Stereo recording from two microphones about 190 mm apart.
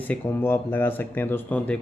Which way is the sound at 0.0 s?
10° left (ahead or behind).